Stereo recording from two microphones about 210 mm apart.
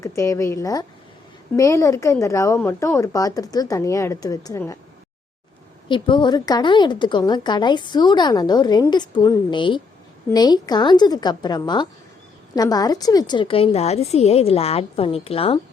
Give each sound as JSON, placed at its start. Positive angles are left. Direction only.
{"t": 0.0, "sound": "speech", "side_deg": 15}
{"t": 5.9, "sound": "a woman's voice", "side_deg": 20}